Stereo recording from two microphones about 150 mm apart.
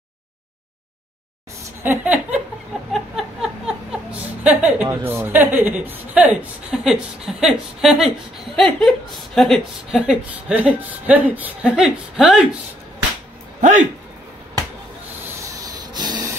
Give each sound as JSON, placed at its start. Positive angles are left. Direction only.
{"t": 1.8, "sound": "speech", "side_deg": -15}
{"t": 2.9, "sound": "a sound", "side_deg": 0}
{"t": 4.4, "sound": "a woman's voice", "side_deg": -10}
{"t": 13.6, "sound": "speech", "side_deg": -55}
{"t": 15.6, "sound": "rub", "side_deg": -30}